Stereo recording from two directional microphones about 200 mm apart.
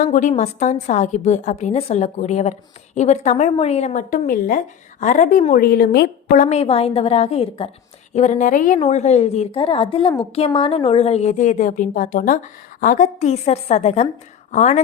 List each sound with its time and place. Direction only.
0.0 s a woman's voice: 40° left (ahead or behind)
6.4 s a woman's voice: 30° left (ahead or behind)